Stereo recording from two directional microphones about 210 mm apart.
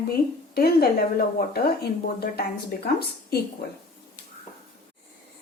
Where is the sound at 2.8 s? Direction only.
50° left (ahead or behind).